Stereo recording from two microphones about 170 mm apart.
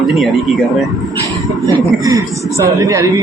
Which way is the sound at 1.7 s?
20° right (ahead or behind).